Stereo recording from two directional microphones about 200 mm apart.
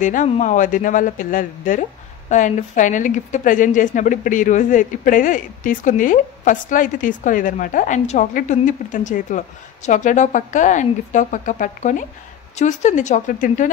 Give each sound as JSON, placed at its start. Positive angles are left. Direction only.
{"t": 0.0, "sound": "speech", "side_deg": 40}